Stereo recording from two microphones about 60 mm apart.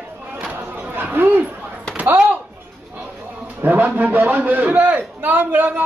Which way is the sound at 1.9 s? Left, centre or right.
Right.